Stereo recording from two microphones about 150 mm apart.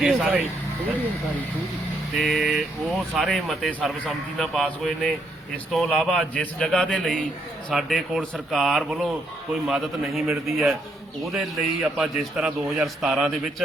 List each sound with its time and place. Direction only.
0.0 s speech: 5° right (ahead or behind)
2.1 s speech: centre (ahead or behind)